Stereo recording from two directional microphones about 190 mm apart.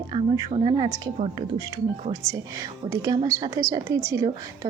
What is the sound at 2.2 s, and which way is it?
A woman's voice, 15° right (ahead or behind).